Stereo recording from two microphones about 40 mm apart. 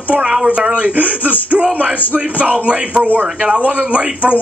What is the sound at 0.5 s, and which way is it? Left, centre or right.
Speech, right.